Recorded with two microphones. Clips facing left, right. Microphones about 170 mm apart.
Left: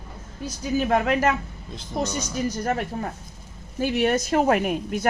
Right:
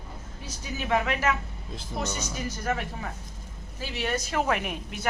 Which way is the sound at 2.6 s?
40° left (ahead or behind).